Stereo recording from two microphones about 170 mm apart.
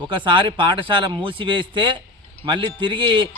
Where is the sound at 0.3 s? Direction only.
30° right (ahead or behind).